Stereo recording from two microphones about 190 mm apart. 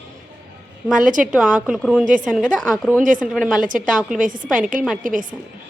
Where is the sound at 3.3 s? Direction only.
Centre (ahead or behind).